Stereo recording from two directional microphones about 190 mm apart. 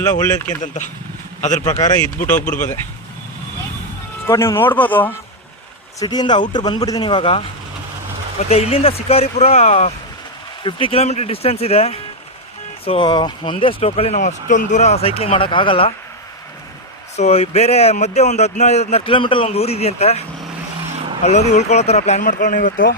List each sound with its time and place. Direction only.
0.4 s a man's voice: 40° left (ahead or behind)
4.3 s speech: 15° left (ahead or behind)
6.0 s a man's voice: 20° left (ahead or behind)
17.2 s a man's voice: 35° left (ahead or behind)
21.2 s a man's voice: 35° left (ahead or behind)